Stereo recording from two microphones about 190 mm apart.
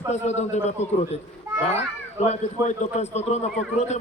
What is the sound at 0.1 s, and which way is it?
Speech, 35° left (ahead or behind).